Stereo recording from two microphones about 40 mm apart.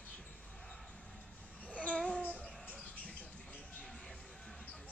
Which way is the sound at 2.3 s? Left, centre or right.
Left.